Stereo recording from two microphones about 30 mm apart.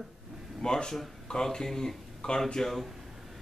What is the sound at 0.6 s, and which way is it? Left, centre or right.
Speech, left.